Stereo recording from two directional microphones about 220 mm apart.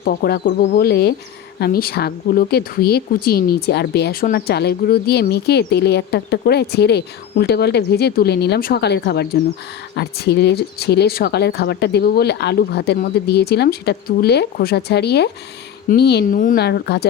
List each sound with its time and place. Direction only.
0.0 s a woman's voice: 45° left (ahead or behind)